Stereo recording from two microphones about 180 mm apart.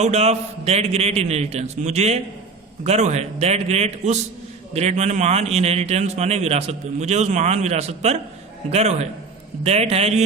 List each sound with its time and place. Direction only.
0.0 s a man's voice: 35° right (ahead or behind)